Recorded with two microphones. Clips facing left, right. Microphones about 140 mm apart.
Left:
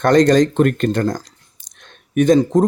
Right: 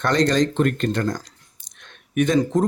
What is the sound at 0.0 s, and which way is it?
Speech, 45° left (ahead or behind).